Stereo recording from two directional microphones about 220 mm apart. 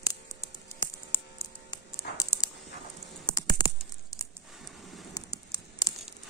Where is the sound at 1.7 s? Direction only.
15° left (ahead or behind).